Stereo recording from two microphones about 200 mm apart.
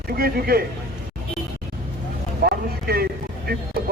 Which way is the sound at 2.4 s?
50° right (ahead or behind).